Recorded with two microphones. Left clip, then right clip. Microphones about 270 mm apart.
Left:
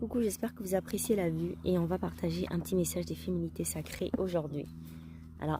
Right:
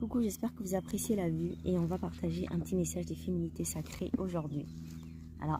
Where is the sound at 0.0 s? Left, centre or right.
Left.